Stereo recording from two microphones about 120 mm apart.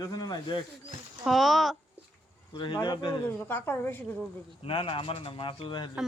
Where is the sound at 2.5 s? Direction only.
35° left (ahead or behind).